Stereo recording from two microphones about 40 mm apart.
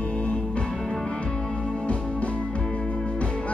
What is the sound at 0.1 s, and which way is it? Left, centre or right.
Music, left.